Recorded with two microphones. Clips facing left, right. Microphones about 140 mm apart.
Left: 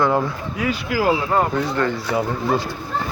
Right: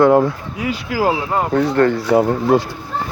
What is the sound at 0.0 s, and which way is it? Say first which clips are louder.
Speech: right 7 dB; 60° right (ahead or behind).